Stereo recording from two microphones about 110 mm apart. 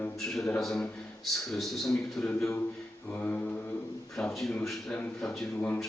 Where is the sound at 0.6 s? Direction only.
Centre (ahead or behind).